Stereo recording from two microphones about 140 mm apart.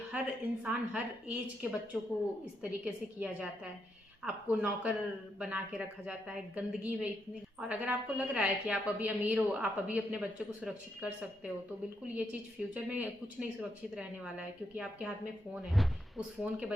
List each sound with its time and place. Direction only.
0.1 s a woman's voice: 10° right (ahead or behind)